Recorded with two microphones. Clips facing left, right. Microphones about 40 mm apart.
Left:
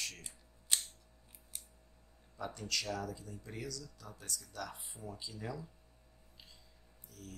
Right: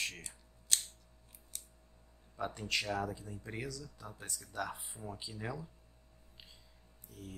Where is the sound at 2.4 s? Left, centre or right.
Right.